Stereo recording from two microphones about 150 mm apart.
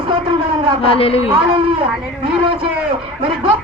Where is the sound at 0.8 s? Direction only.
40° left (ahead or behind).